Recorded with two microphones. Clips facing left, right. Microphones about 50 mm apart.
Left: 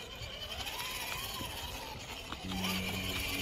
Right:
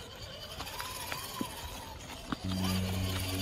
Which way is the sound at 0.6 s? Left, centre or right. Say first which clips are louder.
Right 1 dB; left.